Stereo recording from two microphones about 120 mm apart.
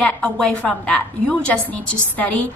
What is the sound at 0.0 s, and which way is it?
A woman's voice, 10° left (ahead or behind).